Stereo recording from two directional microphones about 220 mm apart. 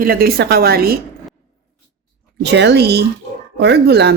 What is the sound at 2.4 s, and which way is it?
A woman's voice, 50° right (ahead or behind).